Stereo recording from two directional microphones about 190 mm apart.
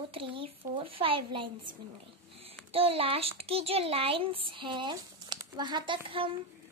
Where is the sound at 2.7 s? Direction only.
30° right (ahead or behind).